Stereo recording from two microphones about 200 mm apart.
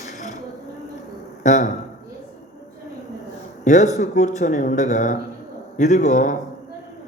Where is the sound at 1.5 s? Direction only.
40° left (ahead or behind).